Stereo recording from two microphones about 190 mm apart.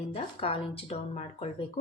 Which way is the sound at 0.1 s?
30° left (ahead or behind).